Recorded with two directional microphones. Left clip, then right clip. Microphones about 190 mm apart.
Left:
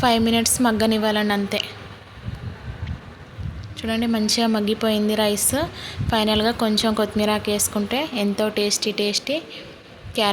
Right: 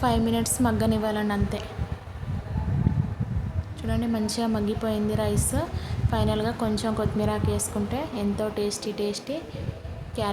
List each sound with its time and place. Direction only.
0.0 s a woman's voice: 15° left (ahead or behind)
3.8 s a woman's voice: 15° left (ahead or behind)